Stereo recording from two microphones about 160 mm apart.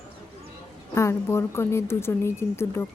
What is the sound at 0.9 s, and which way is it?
Speech, 15° left (ahead or behind).